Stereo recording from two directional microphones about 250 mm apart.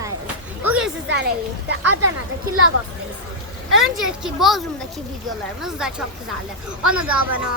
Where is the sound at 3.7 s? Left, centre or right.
Right.